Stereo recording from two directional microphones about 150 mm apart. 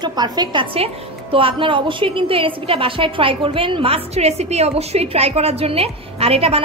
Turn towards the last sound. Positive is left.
turn(degrees=-40)  # may be behind; listen again after turning